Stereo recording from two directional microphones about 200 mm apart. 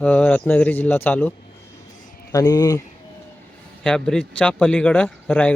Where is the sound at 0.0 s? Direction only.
5° left (ahead or behind).